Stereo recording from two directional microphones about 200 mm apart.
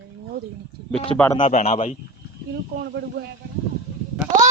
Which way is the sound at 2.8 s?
55° right (ahead or behind).